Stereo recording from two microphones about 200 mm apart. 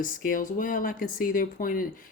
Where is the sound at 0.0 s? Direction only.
45° left (ahead or behind).